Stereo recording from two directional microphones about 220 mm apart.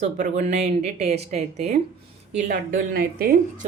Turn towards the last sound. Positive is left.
turn(degrees=-40)  # may be behind; listen again after turning